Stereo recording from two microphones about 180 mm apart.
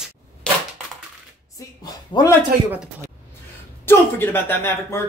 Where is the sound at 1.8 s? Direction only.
20° left (ahead or behind).